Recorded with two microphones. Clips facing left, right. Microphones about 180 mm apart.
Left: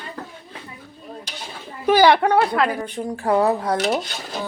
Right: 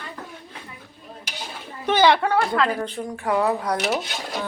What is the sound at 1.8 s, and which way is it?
Speech, 10° left (ahead or behind).